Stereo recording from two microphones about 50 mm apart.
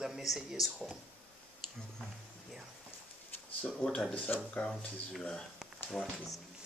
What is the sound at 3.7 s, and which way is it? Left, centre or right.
Speech, centre.